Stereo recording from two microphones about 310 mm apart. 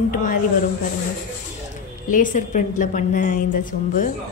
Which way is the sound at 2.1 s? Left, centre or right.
Left.